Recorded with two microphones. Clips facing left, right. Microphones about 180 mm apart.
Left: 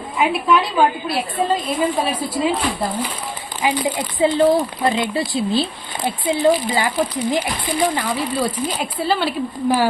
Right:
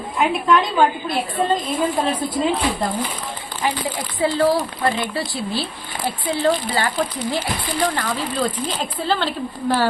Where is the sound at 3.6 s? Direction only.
20° left (ahead or behind).